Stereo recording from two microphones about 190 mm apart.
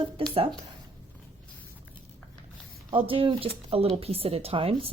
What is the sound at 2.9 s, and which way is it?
Speech, 30° right (ahead or behind).